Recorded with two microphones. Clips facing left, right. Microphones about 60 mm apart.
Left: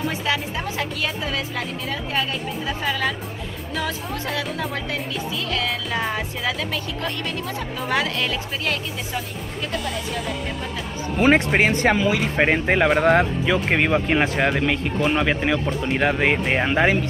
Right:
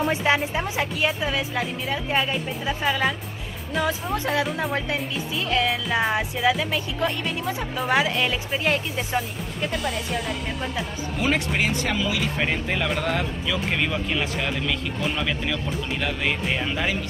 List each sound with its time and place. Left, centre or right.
0.1 s a woman's voice: right
0.6 s speech: centre
5.7 s speech: centre
11.1 s speech: left